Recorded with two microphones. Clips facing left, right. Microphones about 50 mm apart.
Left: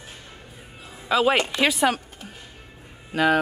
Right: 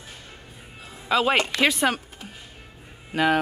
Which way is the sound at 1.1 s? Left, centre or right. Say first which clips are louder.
Left 1 dB; centre.